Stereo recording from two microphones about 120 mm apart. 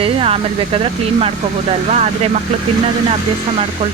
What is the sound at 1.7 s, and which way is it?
Speech, 65° right (ahead or behind).